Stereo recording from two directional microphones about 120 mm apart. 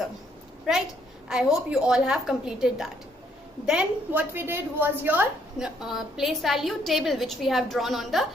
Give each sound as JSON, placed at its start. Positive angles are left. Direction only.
{"t": 1.3, "sound": "a woman's voice", "side_deg": -5}
{"t": 5.5, "sound": "a woman's voice", "side_deg": -5}